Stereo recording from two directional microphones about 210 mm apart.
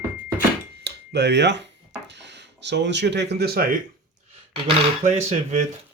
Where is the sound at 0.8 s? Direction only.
55° right (ahead or behind).